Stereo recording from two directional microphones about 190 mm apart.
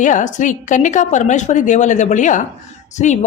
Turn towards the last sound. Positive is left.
turn(degrees=40)  # may be behind; listen again after turning